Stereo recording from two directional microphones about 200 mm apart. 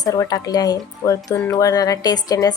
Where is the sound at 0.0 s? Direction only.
20° left (ahead or behind).